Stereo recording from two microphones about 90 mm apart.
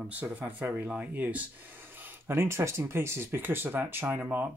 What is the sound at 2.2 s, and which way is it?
Speech, 25° right (ahead or behind).